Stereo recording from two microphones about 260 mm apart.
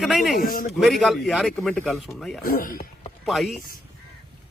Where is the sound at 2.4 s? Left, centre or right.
Left.